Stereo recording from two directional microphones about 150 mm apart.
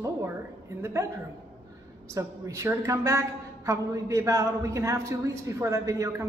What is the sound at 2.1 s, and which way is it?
Speech, 20° right (ahead or behind).